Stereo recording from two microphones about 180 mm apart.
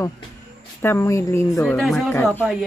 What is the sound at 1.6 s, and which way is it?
Speech, centre (ahead or behind).